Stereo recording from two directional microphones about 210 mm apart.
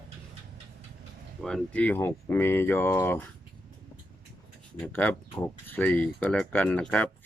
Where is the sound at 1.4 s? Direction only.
Centre (ahead or behind).